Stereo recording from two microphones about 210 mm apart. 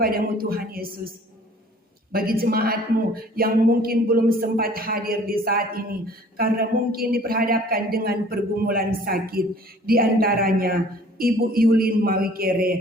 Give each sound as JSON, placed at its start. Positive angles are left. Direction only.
{"t": 0.0, "sound": "a man's voice", "side_deg": -45}
{"t": 2.1, "sound": "a man's voice", "side_deg": -45}